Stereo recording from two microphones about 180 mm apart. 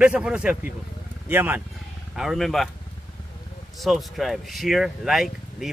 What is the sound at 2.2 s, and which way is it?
Speech, centre (ahead or behind).